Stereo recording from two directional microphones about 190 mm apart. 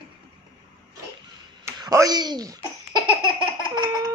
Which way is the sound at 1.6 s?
15° right (ahead or behind).